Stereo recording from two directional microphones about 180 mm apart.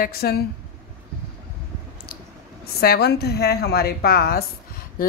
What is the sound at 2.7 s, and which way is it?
A woman's voice, 60° left (ahead or behind).